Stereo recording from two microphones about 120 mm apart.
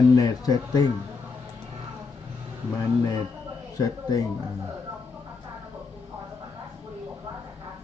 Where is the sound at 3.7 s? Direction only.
30° left (ahead or behind).